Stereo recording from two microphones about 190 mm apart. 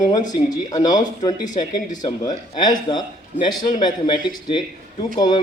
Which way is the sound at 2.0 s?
20° left (ahead or behind).